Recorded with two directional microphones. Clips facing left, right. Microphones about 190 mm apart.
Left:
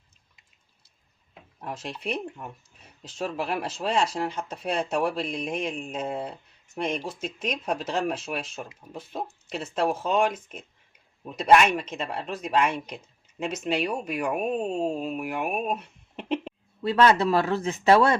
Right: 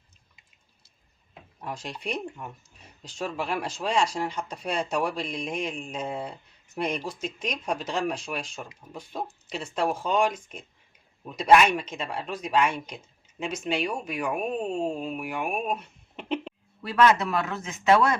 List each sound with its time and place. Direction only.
1.6 s speech: 5° left (ahead or behind)
14.3 s speech: 5° left (ahead or behind)
16.8 s speech: 30° left (ahead or behind)